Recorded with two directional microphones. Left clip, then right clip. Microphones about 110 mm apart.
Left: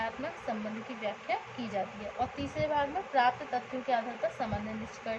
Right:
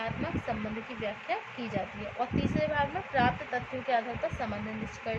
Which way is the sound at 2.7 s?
75° right (ahead or behind).